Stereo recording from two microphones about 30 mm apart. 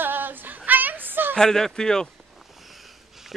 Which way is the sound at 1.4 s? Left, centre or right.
Centre.